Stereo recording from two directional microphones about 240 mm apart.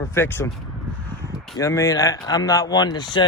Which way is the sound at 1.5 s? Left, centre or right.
Centre.